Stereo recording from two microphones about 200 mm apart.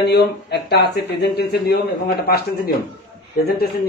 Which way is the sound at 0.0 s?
55° left (ahead or behind).